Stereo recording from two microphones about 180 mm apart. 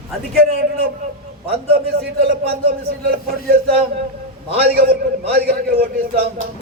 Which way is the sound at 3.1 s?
55° right (ahead or behind).